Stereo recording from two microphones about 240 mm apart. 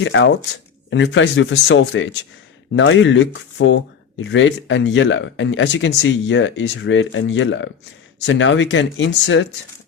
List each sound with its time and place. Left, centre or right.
0.0 s speech: left